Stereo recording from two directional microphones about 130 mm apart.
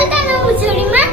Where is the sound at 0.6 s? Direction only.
15° right (ahead or behind).